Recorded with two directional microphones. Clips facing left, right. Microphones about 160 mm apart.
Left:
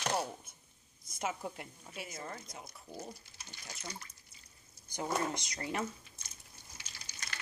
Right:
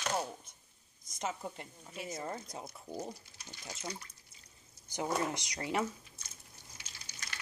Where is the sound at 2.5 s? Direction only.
20° right (ahead or behind).